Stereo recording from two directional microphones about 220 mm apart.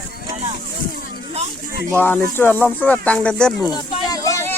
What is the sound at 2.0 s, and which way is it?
Speech, 10° left (ahead or behind).